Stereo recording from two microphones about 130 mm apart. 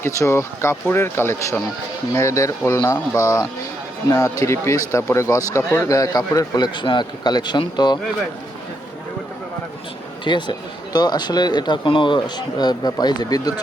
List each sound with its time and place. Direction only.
0.0 s speech: 20° left (ahead or behind); by 7.9 s 35° left (ahead or behind)
10.2 s speech: 35° left (ahead or behind)